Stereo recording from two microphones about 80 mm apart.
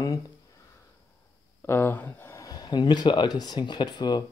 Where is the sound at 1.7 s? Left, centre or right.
Left.